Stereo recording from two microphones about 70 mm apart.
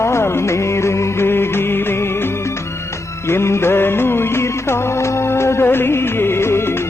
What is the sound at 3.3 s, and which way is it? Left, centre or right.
Music, left.